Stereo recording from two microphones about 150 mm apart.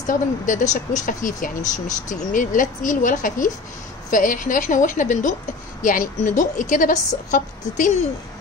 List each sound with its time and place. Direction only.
0.1 s speech: 55° left (ahead or behind)